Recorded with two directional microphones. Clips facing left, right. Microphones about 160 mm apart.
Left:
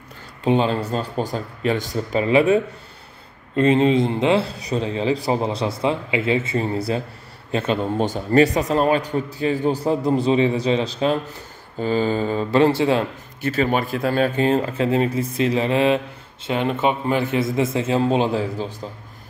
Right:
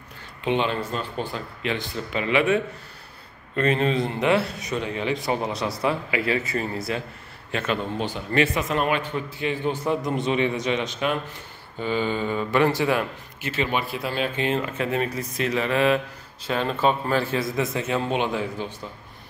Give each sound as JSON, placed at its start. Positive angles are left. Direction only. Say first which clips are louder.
{"t": 0.4, "sound": "a man's voice", "louder": "left 5 dB", "side_deg": 40}
{"t": 13.5, "sound": "a man's voice", "louder": "left 5 dB", "side_deg": 40}